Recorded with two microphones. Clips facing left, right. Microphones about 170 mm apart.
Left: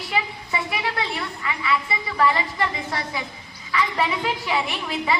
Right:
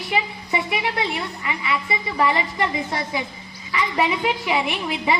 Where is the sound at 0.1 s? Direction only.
20° right (ahead or behind).